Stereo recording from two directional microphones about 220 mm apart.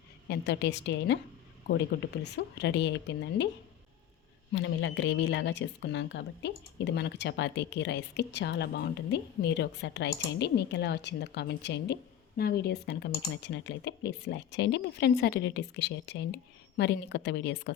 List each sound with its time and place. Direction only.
0.3 s speech: 50° left (ahead or behind)
4.5 s speech: 55° left (ahead or behind)